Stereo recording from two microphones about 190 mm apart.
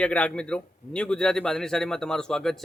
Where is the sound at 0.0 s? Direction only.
5° left (ahead or behind).